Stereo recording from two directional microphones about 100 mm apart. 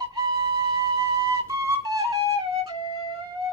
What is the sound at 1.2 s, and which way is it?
Flute, 35° right (ahead or behind).